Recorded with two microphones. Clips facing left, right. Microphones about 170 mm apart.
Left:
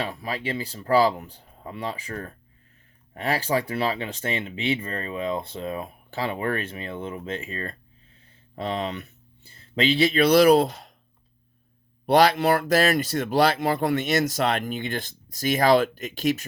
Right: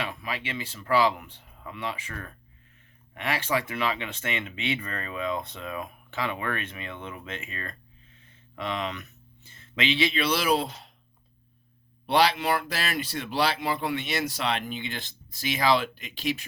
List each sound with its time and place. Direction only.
0.0 s speech: 35° left (ahead or behind)
12.0 s speech: 45° left (ahead or behind)